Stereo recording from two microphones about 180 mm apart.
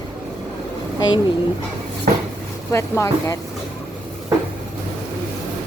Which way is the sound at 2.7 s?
15° left (ahead or behind).